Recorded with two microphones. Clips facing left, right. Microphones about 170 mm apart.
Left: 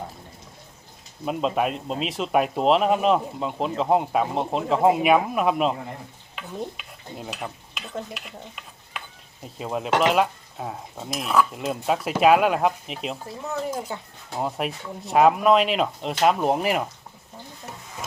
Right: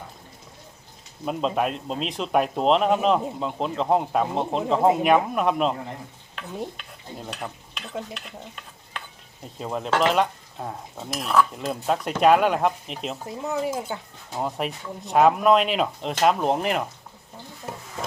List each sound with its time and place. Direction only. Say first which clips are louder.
1.2 s speech: left 1 dB; 5° left (ahead or behind)
6.3 s stir: even; 5° left (ahead or behind)
9.4 s speech: left 1 dB; 5° left (ahead or behind)
13.2 s speech: right 6 dB; 15° right (ahead or behind)
13.7 s speech: right 1 dB; centre (ahead or behind)